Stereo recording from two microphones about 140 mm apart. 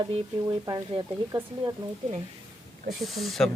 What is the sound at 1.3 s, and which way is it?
Speech, 25° right (ahead or behind).